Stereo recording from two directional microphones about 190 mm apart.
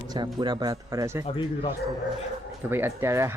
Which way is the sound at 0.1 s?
20° right (ahead or behind).